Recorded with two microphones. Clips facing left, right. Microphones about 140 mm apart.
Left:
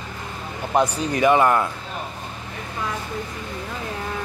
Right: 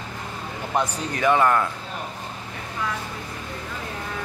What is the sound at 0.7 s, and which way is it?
Speech, 15° left (ahead or behind).